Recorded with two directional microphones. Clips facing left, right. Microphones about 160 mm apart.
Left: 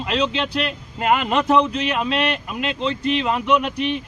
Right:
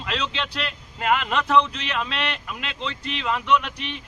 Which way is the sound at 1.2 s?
15° left (ahead or behind).